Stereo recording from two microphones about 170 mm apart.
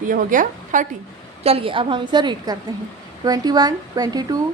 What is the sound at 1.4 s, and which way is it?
A woman's voice, 35° right (ahead or behind).